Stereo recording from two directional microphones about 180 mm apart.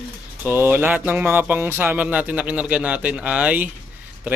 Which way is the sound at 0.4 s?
15° right (ahead or behind).